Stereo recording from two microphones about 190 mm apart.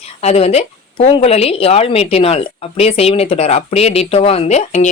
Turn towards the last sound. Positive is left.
turn(degrees=35)  # may be behind; listen again after turning